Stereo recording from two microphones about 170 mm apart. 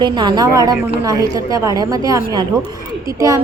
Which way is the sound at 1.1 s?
20° right (ahead or behind).